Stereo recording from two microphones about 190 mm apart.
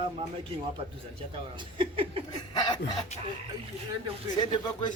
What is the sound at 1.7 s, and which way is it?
Speech, 30° right (ahead or behind).